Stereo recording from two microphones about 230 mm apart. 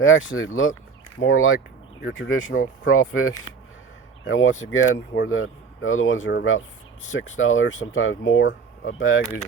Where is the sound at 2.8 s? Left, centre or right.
Left.